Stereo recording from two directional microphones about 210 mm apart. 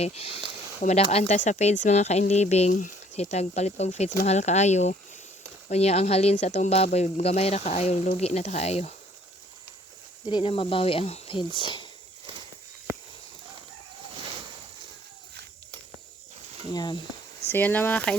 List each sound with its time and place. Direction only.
0.0 s speech: 30° left (ahead or behind)
10.2 s speech: 25° left (ahead or behind)
16.7 s speech: 20° left (ahead or behind)
17.5 s speech: 10° left (ahead or behind)